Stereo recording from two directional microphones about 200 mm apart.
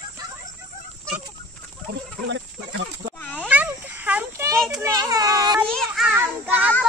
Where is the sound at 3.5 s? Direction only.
10° right (ahead or behind).